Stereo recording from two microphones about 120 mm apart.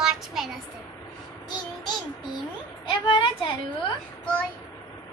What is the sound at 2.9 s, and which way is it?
Speech, 45° left (ahead or behind).